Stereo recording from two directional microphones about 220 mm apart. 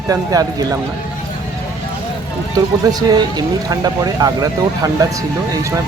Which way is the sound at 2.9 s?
20° right (ahead or behind).